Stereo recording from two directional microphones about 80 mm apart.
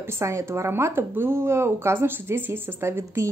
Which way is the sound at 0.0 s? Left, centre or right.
Right.